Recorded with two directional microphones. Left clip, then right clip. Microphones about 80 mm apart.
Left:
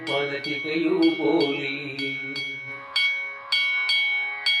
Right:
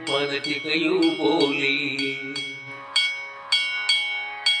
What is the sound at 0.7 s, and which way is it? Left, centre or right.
Music, right.